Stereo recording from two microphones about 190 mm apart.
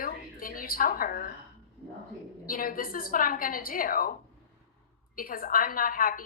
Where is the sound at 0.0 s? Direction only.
50° left (ahead or behind).